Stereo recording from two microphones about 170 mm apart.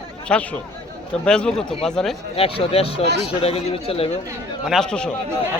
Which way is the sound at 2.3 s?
35° left (ahead or behind).